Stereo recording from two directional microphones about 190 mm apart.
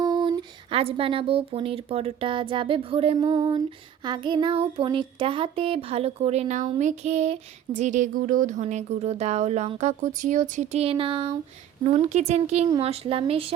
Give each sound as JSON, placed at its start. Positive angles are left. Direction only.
{"t": 0.0, "sound": "speech", "side_deg": -20}
{"t": 4.0, "sound": "child singing", "side_deg": -25}